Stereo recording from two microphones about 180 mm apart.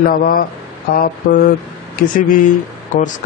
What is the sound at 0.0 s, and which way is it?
Speech, 50° left (ahead or behind).